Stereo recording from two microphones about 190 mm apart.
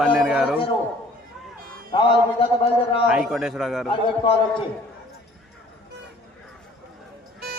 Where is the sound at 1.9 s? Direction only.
25° left (ahead or behind).